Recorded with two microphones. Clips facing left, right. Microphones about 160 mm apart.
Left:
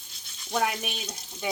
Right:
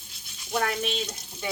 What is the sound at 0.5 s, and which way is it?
Speech, 10° left (ahead or behind).